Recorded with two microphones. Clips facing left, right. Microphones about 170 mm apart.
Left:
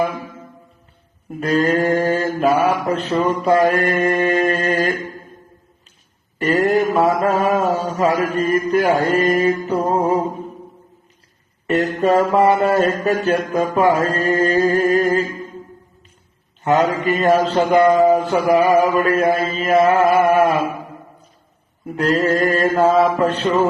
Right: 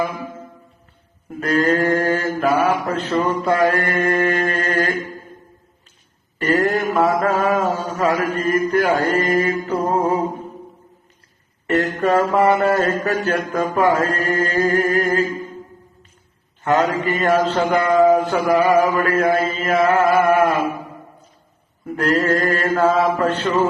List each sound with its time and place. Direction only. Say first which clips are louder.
1.4 s mantra: left 1 dB; 25° left (ahead or behind)
6.4 s speech: left 1 dB; 20° left (ahead or behind)
6.7 s a sound: left 2 dB; centre (ahead or behind)
7.2 s mantra: left 1 dB; 20° left (ahead or behind)
11.6 s speech: left 1 dB; 20° left (ahead or behind)
12.3 s mantra: left 1 dB; 20° left (ahead or behind)
16.6 s mantra: left 2 dB; 20° left (ahead or behind)
18.5 s mantra: left 1 dB; 30° left (ahead or behind)
18.8 s mantra: left 1 dB; 20° left (ahead or behind)
21.8 s mantra: left 1 dB; 20° left (ahead or behind)